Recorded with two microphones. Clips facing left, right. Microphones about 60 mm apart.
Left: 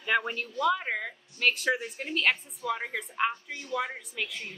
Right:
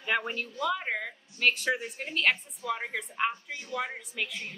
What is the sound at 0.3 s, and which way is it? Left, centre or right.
A woman's voice, centre.